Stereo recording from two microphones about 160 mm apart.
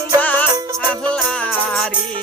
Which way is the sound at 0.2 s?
10° left (ahead or behind).